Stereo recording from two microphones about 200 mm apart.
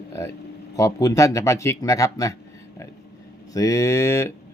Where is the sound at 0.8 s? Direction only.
15° left (ahead or behind).